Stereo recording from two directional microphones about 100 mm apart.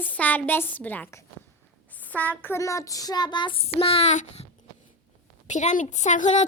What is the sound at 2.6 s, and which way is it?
Child singing, 30° left (ahead or behind).